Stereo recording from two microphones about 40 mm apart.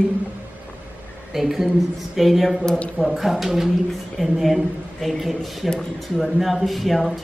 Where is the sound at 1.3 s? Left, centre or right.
Centre.